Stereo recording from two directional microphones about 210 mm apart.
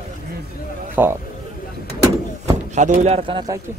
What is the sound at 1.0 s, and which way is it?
Speech, 10° right (ahead or behind).